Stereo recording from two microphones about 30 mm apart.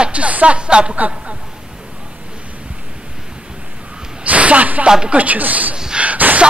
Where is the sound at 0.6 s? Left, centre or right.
Right.